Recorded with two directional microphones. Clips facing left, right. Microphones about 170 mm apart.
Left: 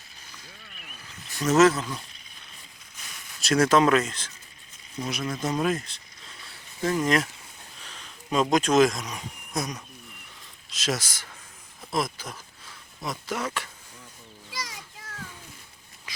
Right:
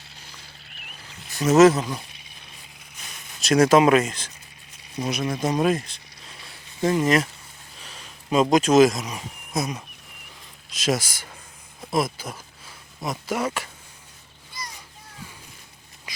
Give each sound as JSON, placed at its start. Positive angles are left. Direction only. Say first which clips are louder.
{"t": 1.7, "sound": "speech", "louder": "right 5 dB", "side_deg": -25}
{"t": 3.4, "sound": "speech", "louder": "right 4 dB", "side_deg": -15}
{"t": 5.5, "sound": "speech", "louder": "right 4 dB", "side_deg": -30}
{"t": 6.8, "sound": "speech", "louder": "right 4 dB", "side_deg": -10}
{"t": 8.3, "sound": "speech", "louder": "right 4 dB", "side_deg": -10}
{"t": 14.5, "sound": "children playing", "louder": "left 1 dB", "side_deg": 90}
{"t": 16.1, "sound": "a sound", "louder": "right 2 dB", "side_deg": -15}